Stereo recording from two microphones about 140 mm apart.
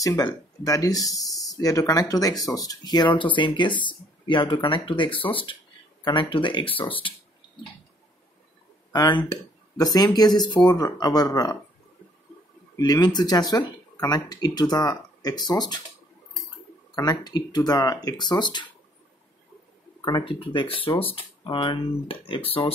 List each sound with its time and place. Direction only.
0.7 s speech: 25° left (ahead or behind)
8.9 s speech: 30° left (ahead or behind)
12.7 s speech: 30° left (ahead or behind)
16.9 s speech: 30° left (ahead or behind)
20.1 s speech: 35° left (ahead or behind)